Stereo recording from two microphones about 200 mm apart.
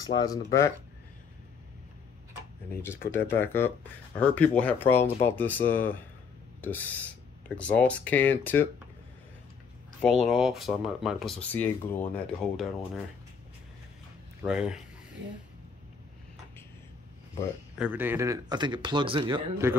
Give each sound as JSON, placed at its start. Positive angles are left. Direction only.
{"t": 0.0, "sound": "speech", "side_deg": 20}
{"t": 2.7, "sound": "speech", "side_deg": 10}
{"t": 10.0, "sound": "speech", "side_deg": 0}
{"t": 14.4, "sound": "speech", "side_deg": -5}
{"t": 17.7, "sound": "speech", "side_deg": -5}
{"t": 19.6, "sound": "a man's voice", "side_deg": -10}